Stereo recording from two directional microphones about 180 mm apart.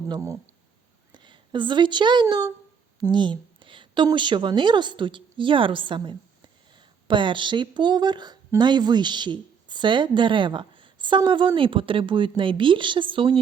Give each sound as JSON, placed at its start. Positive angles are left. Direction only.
{"t": 0.1, "sound": "a woman's voice", "side_deg": -15}